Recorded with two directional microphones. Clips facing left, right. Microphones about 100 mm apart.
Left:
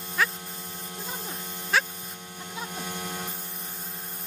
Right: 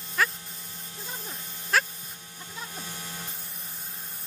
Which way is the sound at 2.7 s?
50° left (ahead or behind).